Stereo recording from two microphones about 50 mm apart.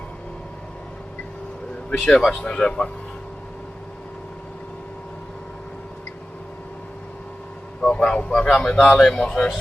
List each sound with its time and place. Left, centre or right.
1.9 s speech: centre
7.8 s a sound: centre
9.1 s speech: centre